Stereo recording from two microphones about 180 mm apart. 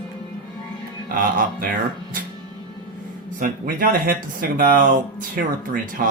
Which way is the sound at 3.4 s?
50° right (ahead or behind).